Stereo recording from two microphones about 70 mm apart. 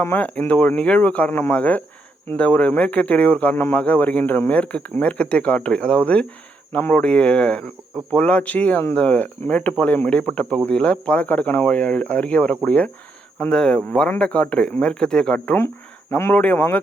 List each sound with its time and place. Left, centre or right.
0.2 s speech: left
1.3 s speech: left
1.5 s speech: left
3.5 s speech: left
3.8 s speech: left
16.3 s speech: left